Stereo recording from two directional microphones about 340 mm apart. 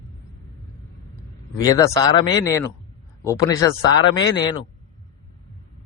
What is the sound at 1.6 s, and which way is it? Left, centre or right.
Speech, centre.